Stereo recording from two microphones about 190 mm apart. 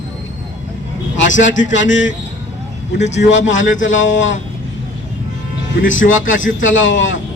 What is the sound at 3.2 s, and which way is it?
A man's voice, 75° left (ahead or behind).